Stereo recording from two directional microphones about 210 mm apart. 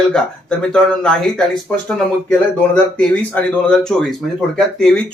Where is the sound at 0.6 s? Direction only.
5° left (ahead or behind).